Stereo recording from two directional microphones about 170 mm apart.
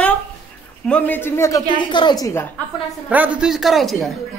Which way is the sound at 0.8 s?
10° left (ahead or behind).